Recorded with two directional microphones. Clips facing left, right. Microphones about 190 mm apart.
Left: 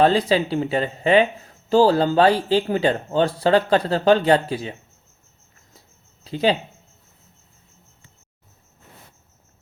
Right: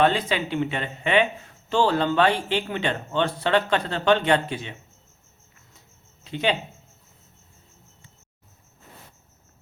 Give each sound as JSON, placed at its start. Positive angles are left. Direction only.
{"t": 0.0, "sound": "speech", "side_deg": 35}
{"t": 6.2, "sound": "speech", "side_deg": 35}